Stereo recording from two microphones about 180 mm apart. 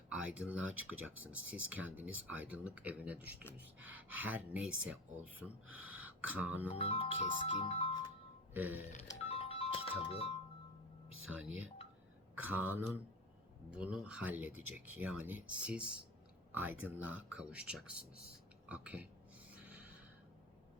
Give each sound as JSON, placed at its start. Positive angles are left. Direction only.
{"t": 0.1, "sound": "speech", "side_deg": -5}
{"t": 6.7, "sound": "speech", "side_deg": 30}
{"t": 8.5, "sound": "speech", "side_deg": -10}
{"t": 9.2, "sound": "music", "side_deg": 30}
{"t": 10.1, "sound": "speech", "side_deg": 35}
{"t": 11.3, "sound": "speech", "side_deg": -10}
{"t": 19.5, "sound": "gasp", "side_deg": -10}